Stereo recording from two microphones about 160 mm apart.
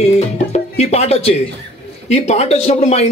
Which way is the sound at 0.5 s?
45° left (ahead or behind).